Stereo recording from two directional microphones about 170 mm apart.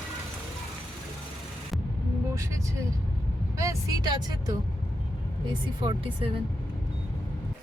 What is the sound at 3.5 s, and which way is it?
Speech, 20° right (ahead or behind).